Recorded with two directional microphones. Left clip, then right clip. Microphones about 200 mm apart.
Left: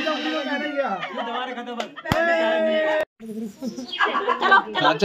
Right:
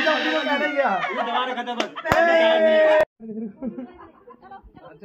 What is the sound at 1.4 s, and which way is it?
Speech, 45° left (ahead or behind).